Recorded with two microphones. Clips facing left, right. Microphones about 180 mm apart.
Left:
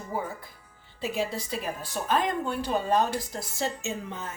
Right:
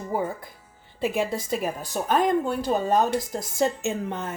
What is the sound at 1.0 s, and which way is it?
A woman's voice, 55° right (ahead or behind).